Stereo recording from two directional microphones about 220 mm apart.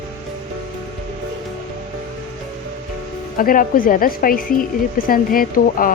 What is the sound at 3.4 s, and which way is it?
A woman's voice, 40° left (ahead or behind).